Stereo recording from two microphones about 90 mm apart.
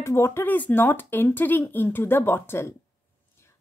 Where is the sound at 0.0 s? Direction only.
30° left (ahead or behind).